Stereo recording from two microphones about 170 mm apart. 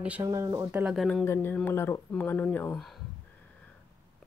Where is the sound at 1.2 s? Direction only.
15° left (ahead or behind).